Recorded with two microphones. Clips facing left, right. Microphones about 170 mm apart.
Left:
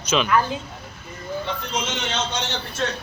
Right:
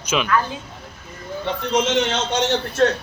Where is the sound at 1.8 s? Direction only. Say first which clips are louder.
Right 8 dB; 80° right.